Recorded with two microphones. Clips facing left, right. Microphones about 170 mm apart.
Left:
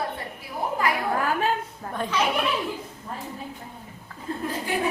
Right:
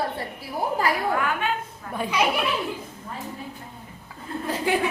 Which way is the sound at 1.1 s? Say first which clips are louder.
Left 1 dB; 35° left (ahead or behind).